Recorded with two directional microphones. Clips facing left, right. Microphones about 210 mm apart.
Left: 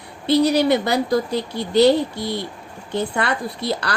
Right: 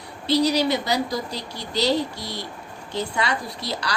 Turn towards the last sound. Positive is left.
turn(degrees=55)  # may be behind; listen again after turning